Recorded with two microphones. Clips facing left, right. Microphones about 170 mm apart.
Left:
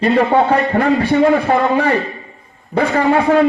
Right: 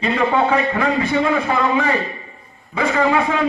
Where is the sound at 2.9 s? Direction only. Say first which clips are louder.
Left 5 dB; 55° left (ahead or behind).